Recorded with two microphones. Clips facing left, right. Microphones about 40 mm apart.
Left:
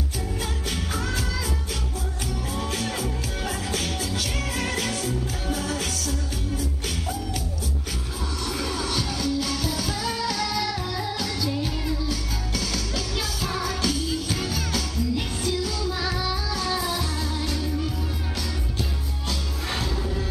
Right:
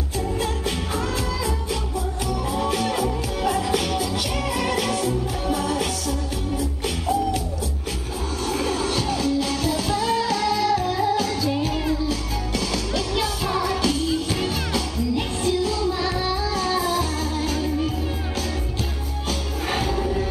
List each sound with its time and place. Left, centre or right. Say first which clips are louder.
0.4 s music: right 5 dB; right
2.5 s music: right 6 dB; centre
8.5 s music: right 5 dB; right
19.7 s music: right 6 dB; right